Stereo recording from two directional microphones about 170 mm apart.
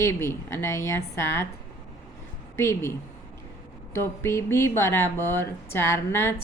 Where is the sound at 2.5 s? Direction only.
15° left (ahead or behind).